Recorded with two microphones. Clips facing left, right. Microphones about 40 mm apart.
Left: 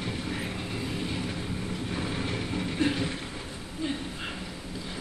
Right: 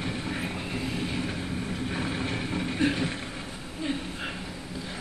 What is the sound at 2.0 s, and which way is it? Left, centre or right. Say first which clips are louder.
Vehicle: right 1 dB; centre.